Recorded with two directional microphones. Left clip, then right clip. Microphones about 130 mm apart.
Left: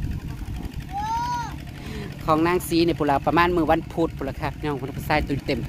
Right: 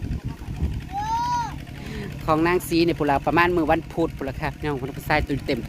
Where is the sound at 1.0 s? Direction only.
80° right.